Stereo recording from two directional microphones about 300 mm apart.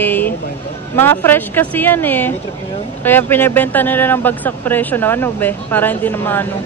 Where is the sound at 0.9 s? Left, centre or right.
Centre.